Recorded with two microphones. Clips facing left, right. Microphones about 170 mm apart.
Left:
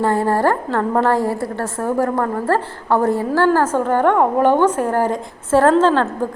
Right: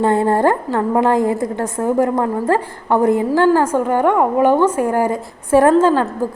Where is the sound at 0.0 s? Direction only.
20° right (ahead or behind).